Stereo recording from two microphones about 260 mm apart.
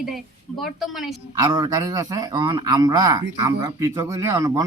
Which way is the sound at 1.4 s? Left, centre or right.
Centre.